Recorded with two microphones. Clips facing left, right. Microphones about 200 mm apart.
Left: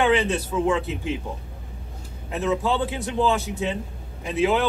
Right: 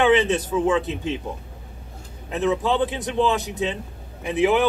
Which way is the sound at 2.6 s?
15° right (ahead or behind).